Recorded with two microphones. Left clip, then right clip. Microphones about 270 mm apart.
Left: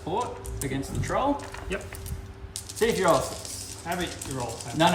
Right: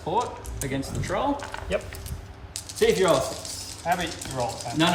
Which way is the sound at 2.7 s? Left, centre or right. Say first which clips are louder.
Right 2 dB; centre.